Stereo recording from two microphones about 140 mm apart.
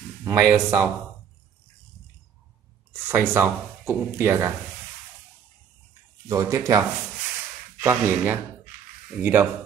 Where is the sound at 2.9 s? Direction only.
15° right (ahead or behind).